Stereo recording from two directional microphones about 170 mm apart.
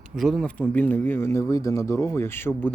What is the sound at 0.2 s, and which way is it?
Speech, centre (ahead or behind).